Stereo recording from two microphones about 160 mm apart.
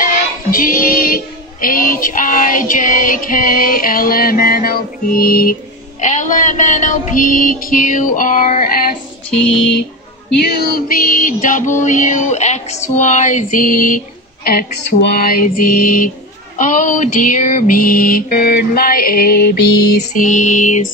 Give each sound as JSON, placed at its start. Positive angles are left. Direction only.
{"t": 0.0, "sound": "child singing", "side_deg": 60}
{"t": 9.3, "sound": "music", "side_deg": 5}
{"t": 10.3, "sound": "music", "side_deg": 70}